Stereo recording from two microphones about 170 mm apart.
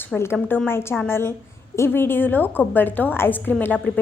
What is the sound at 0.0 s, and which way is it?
A woman's voice, 15° left (ahead or behind).